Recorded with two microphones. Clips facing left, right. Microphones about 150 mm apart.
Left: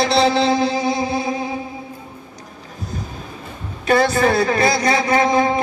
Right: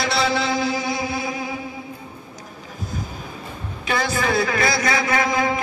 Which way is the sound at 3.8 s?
45° left (ahead or behind).